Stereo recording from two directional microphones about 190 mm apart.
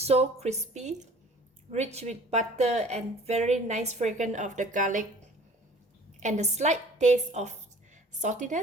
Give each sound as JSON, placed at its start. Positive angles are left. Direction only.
{"t": 0.0, "sound": "a woman's voice", "side_deg": -35}
{"t": 6.1, "sound": "a woman's voice", "side_deg": -40}